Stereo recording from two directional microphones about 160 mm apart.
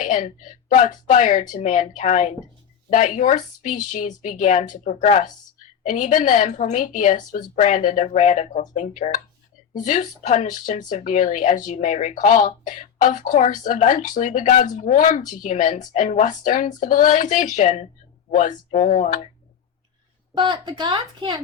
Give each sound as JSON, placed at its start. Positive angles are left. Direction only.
{"t": 0.0, "sound": "speech", "side_deg": 50}
{"t": 20.3, "sound": "a woman's voice", "side_deg": -25}